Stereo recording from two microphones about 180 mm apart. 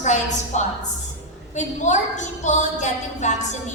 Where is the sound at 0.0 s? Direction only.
40° left (ahead or behind).